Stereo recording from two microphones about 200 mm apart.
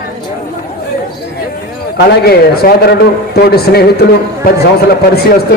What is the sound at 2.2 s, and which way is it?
A man's voice, 50° left (ahead or behind).